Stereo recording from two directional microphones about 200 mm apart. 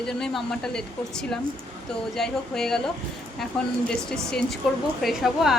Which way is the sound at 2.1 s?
Centre (ahead or behind).